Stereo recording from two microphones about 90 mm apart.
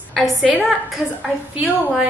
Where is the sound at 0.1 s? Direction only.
Centre (ahead or behind).